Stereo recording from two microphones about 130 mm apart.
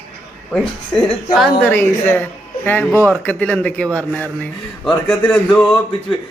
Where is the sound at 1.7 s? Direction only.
15° left (ahead or behind).